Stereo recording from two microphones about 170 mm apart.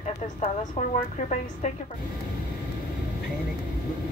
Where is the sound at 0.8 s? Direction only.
40° left (ahead or behind).